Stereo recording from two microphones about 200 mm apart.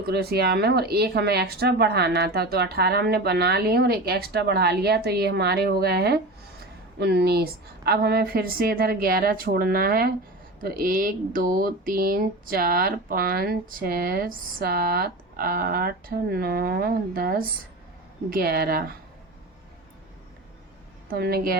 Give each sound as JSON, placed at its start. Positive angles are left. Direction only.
{"t": 0.1, "sound": "speech", "side_deg": -50}
{"t": 21.1, "sound": "speech", "side_deg": -50}